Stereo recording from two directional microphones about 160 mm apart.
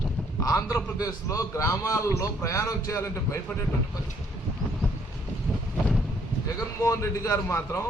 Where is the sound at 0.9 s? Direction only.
20° left (ahead or behind).